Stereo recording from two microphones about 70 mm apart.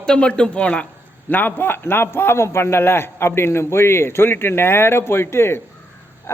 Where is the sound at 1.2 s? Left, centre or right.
Left.